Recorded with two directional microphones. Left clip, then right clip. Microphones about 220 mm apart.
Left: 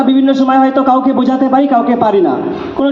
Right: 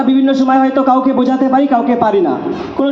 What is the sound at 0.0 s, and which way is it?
A man's voice, 35° left (ahead or behind).